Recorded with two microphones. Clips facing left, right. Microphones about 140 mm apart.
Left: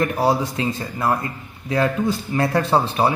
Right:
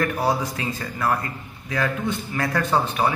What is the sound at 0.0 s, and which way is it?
Speech, 25° left (ahead or behind).